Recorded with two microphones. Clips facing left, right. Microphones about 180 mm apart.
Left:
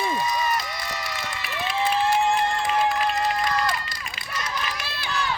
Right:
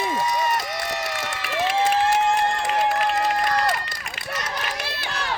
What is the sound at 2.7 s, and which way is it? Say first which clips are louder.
Run: right 1 dB; 65° right (ahead or behind).